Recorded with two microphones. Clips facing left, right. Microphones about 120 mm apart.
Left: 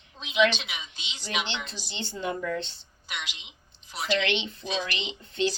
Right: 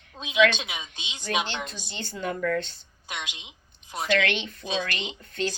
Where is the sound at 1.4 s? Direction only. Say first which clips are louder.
Right 2 dB; 45° right (ahead or behind).